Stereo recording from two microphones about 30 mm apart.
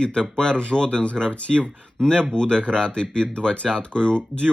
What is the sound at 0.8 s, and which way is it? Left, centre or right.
Speech, left.